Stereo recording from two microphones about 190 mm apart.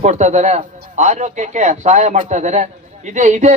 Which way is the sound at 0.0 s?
40° right (ahead or behind).